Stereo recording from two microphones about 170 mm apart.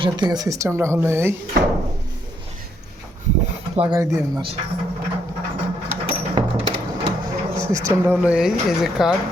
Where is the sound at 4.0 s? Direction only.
20° right (ahead or behind).